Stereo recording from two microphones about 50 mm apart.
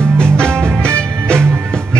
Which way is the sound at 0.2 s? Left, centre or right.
Right.